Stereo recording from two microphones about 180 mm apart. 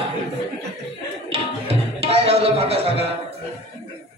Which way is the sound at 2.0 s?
35° right (ahead or behind).